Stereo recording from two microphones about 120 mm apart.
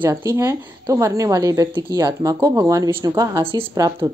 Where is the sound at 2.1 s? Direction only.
30° right (ahead or behind).